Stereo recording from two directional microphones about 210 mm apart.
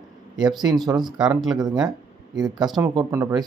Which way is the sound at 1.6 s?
20° right (ahead or behind).